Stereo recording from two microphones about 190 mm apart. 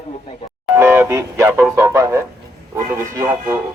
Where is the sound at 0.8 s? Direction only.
15° right (ahead or behind).